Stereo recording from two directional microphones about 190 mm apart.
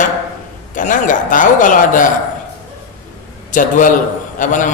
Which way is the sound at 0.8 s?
45° left (ahead or behind).